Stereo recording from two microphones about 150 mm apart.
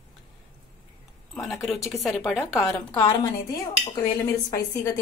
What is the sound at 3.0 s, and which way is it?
A woman's voice, 25° left (ahead or behind).